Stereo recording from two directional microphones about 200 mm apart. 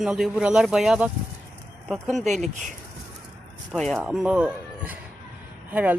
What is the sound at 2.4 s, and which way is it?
Speech, 35° right (ahead or behind).